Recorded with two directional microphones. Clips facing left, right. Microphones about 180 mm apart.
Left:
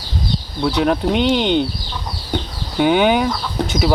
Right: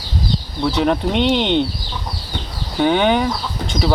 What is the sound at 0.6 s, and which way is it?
Speech, centre (ahead or behind).